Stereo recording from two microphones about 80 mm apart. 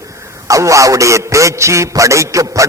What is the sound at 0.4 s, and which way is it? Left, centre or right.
A man's voice, right.